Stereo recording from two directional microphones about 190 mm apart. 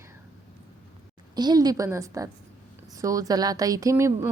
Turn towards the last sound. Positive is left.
turn(degrees=-15)  # may be behind; listen again after turning